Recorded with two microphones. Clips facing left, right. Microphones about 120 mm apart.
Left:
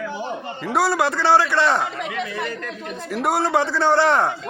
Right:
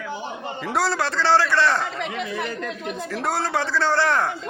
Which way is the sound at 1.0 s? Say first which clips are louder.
Left 1 dB; 15° left (ahead or behind).